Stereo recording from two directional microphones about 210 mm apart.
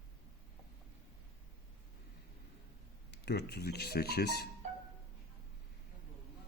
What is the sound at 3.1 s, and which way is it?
Speech, 50° left (ahead or behind).